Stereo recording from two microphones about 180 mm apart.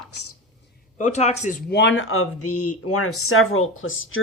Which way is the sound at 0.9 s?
40° left (ahead or behind).